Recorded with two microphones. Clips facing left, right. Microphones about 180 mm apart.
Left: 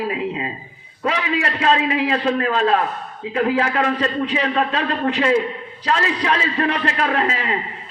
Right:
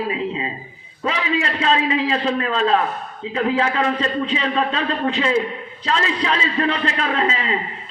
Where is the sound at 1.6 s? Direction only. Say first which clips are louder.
Left 2 dB; 55° left (ahead or behind).